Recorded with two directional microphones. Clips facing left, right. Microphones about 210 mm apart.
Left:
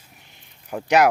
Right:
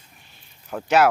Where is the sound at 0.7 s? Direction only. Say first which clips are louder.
Left 1 dB; 15° left (ahead or behind).